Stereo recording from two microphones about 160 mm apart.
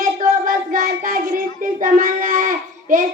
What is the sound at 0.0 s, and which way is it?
Child singing, 60° right (ahead or behind).